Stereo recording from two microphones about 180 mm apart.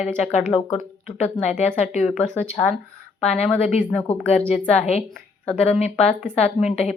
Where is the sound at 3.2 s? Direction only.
35° left (ahead or behind).